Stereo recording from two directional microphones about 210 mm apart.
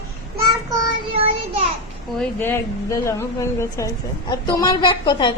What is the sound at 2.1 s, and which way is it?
Speech, 10° left (ahead or behind).